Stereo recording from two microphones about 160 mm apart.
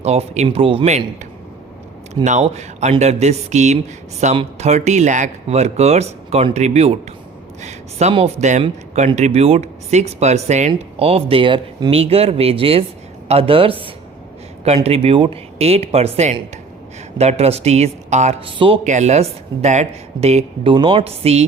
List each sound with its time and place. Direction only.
0.0 s speech: 40° right (ahead or behind)
14.8 s speech: 40° right (ahead or behind)
18.9 s speech: 45° right (ahead or behind)